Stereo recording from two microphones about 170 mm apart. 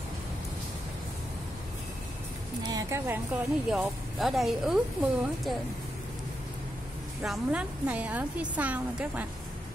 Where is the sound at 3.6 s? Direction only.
Centre (ahead or behind).